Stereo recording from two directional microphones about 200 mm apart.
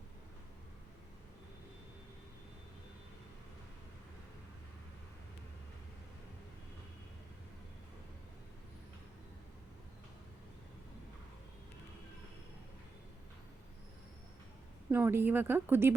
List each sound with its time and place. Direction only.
14.8 s speech: 10° right (ahead or behind)